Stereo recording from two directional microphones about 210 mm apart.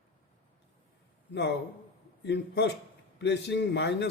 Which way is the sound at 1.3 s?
55° left (ahead or behind).